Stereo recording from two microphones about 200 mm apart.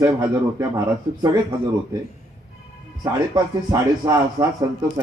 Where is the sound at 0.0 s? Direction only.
15° right (ahead or behind).